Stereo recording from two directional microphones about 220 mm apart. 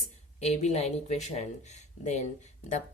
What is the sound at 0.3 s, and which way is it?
A woman's voice, 30° left (ahead or behind).